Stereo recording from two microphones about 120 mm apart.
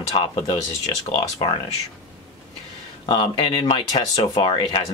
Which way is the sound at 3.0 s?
45° left (ahead or behind).